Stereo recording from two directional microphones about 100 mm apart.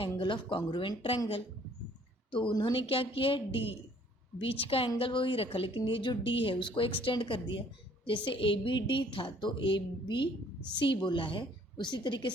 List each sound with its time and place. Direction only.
0.2 s a woman's voice: 55° left (ahead or behind)
2.3 s a woman's voice: 55° left (ahead or behind); by 4.9 s 70° left (ahead or behind)
4.9 s a woman's voice: 60° left (ahead or behind)